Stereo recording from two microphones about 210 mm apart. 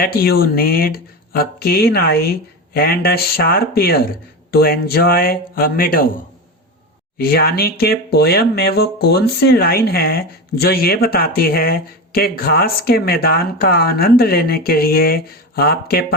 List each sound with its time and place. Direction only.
0.0 s speech: 45° left (ahead or behind)
7.2 s speech: 45° left (ahead or behind)